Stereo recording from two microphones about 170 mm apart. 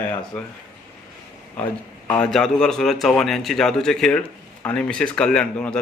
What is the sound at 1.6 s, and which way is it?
A man's voice, 10° left (ahead or behind).